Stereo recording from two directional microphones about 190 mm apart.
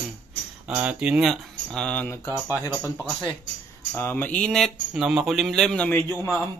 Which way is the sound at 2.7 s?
10° right (ahead or behind).